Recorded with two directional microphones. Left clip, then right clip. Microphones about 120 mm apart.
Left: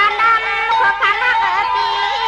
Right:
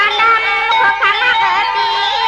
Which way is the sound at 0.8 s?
Centre (ahead or behind).